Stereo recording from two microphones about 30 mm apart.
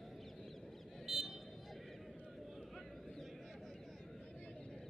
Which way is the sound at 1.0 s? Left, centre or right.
Centre.